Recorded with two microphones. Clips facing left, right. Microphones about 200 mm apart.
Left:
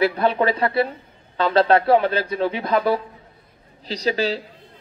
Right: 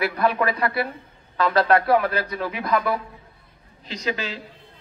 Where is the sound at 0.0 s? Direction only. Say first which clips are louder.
Left 3 dB; 25° left (ahead or behind).